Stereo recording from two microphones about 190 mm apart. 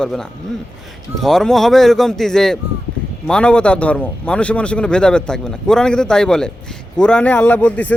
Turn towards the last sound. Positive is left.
turn(degrees=5)  # may be behind; listen again after turning